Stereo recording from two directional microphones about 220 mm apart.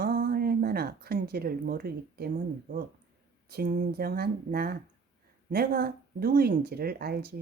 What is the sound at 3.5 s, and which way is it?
A woman's voice, 40° right (ahead or behind).